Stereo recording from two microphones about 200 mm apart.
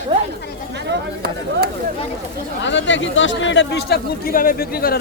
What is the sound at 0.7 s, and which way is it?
Speech, 50° right (ahead or behind).